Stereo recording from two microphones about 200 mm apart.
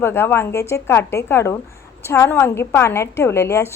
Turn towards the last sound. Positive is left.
turn(degrees=15)  # may be behind; listen again after turning